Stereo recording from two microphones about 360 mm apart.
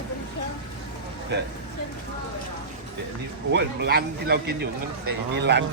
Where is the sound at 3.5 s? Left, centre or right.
Right.